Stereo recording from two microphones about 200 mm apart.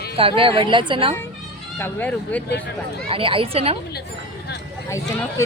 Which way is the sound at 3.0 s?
25° right (ahead or behind).